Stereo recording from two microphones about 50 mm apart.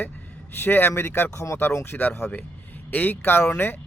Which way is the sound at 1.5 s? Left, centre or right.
Left.